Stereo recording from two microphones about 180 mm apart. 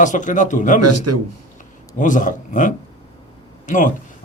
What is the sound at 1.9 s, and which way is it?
A man's voice, 45° left (ahead or behind).